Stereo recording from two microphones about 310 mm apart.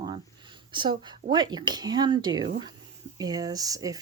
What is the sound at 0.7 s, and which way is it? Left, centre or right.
Speech, centre.